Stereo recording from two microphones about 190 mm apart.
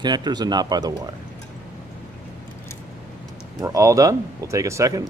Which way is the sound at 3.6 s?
15° right (ahead or behind).